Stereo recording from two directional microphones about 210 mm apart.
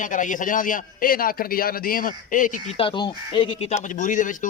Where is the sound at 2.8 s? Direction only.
20° left (ahead or behind); by 4.5 s 40° left (ahead or behind).